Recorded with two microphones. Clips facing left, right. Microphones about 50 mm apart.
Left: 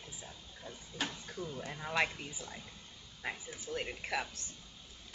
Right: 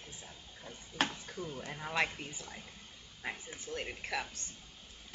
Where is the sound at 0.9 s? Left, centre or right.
Right.